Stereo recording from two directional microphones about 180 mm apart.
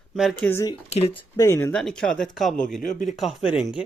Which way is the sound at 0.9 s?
35° left (ahead or behind).